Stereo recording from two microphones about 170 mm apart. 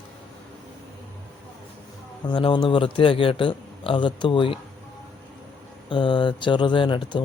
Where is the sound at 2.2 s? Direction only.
30° left (ahead or behind).